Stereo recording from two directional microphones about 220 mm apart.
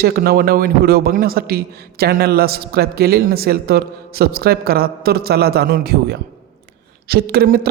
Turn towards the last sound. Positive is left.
turn(degrees=-45)  # may be behind; listen again after turning